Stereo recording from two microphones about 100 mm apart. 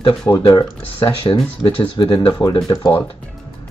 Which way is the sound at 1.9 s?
45° left (ahead or behind).